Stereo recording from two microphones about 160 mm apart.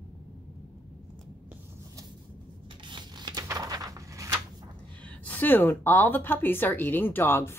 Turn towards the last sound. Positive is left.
turn(degrees=15)  # may be behind; listen again after turning